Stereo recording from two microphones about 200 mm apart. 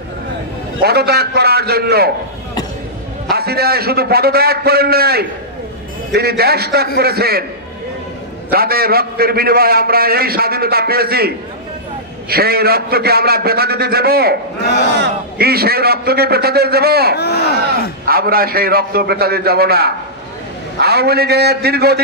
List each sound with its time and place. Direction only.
0.8 s a man's voice: 55° right (ahead or behind)
3.3 s a man's voice: 50° right (ahead or behind)
8.5 s a man's voice: 50° right (ahead or behind)
17.1 s speech: 55° left (ahead or behind)
18.0 s a man's voice: 50° right (ahead or behind)